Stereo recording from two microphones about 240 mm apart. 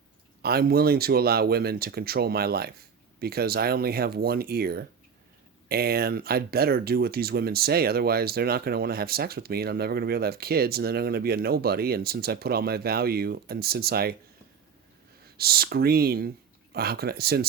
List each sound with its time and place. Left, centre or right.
0.4 s speech: right
15.4 s speech: right